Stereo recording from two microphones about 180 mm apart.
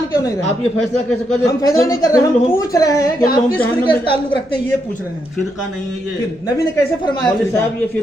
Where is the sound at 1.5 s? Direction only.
20° left (ahead or behind).